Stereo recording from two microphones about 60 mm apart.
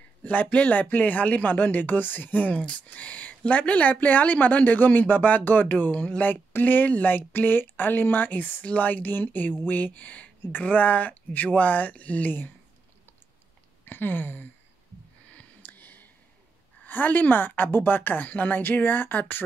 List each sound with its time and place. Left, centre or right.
0.2 s speech: left
6.2 s a woman's voice: left
13.8 s a woman's voice: left
15.6 s a sound: left
16.8 s a woman's voice: left